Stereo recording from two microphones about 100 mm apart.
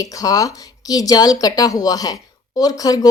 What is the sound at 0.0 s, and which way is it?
Speech, 35° left (ahead or behind).